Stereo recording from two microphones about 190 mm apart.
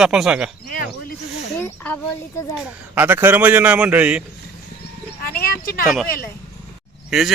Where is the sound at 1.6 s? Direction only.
10° left (ahead or behind).